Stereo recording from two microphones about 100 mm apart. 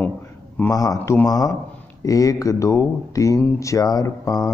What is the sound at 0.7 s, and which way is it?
Speech, 35° left (ahead or behind).